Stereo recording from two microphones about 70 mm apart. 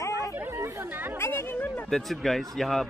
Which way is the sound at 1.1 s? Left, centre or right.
Left.